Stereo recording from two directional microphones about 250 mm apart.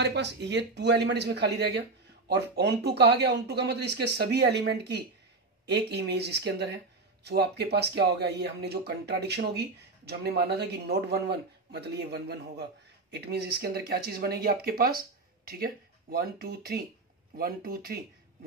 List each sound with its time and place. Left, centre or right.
0.0 s speech: right